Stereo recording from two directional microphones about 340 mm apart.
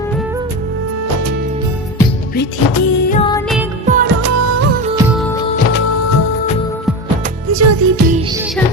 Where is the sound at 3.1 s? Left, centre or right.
Centre.